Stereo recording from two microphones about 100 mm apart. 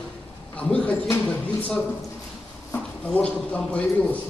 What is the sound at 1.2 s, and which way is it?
A man's voice, 15° left (ahead or behind).